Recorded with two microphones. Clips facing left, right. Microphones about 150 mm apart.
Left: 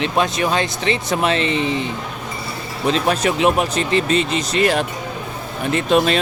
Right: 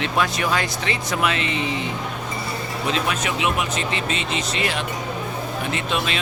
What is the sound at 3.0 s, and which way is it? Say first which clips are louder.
Speech: left 7 dB; 35° left (ahead or behind).